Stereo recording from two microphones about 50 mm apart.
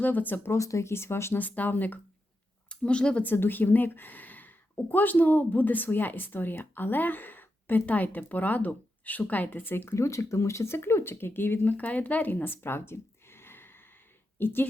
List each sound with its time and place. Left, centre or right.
0.0 s speech: left
0.5 s speech: left
1.4 s speech: left
2.6 s speech: left
3.2 s speech: left
9.9 s speech: left
12.3 s a sound: left
14.3 s speech: left